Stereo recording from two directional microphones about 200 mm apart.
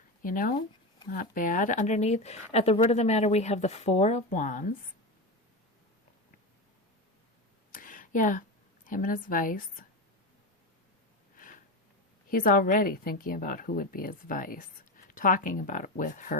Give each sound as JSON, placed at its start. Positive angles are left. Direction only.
{"t": 0.2, "sound": "speech", "side_deg": 45}
{"t": 7.7, "sound": "a sound", "side_deg": 40}
{"t": 11.3, "sound": "sniff", "side_deg": 40}
{"t": 12.3, "sound": "a woman's voice", "side_deg": 45}